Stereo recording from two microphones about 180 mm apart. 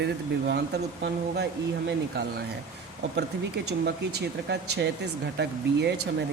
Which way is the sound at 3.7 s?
65° right (ahead or behind).